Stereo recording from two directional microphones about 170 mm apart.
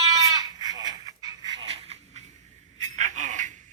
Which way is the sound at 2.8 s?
45° right (ahead or behind).